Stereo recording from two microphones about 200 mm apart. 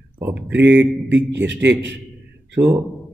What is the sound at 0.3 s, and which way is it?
Speech, 60° right (ahead or behind).